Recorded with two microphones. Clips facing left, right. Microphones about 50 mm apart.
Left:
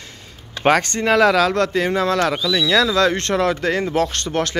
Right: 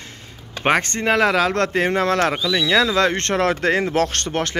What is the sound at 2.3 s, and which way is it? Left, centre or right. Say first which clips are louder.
Speech: left 1 dB; centre.